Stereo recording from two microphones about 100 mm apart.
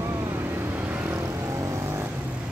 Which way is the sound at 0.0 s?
25° right (ahead or behind).